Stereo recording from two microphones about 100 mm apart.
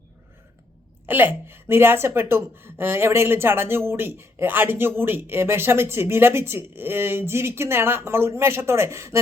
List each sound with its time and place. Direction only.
1.0 s a woman's voice: 20° right (ahead or behind)